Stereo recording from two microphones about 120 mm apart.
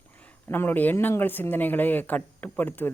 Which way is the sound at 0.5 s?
15° left (ahead or behind).